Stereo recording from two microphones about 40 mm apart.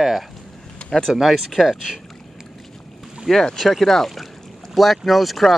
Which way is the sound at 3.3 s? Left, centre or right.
Centre.